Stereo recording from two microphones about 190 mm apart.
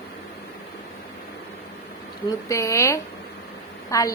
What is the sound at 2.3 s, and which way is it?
Speech, 15° left (ahead or behind).